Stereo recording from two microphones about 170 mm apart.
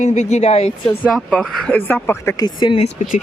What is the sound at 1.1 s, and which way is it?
Speech, 5° left (ahead or behind).